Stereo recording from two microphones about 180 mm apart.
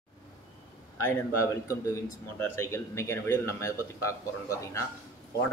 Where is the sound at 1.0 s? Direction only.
15° left (ahead or behind).